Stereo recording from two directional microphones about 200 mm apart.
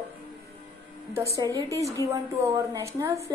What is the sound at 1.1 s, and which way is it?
Speech, 15° right (ahead or behind).